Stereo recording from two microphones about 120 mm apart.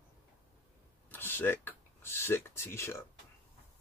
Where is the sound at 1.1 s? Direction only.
20° left (ahead or behind).